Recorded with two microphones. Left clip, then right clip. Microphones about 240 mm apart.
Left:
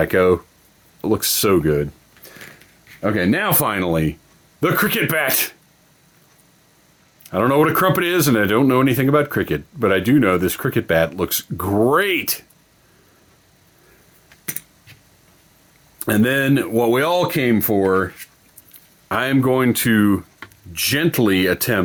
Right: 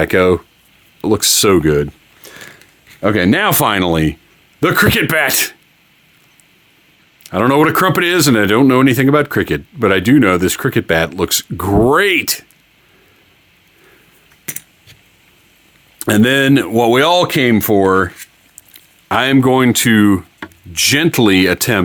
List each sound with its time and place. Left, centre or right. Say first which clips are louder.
0.0 s speech: right 3 dB; right
7.2 s speech: right 4 dB; right
14.4 s typing: right 3 dB; right
16.0 s speech: right 6 dB; right